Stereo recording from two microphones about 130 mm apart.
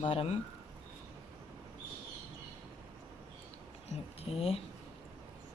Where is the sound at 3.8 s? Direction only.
50° left (ahead or behind).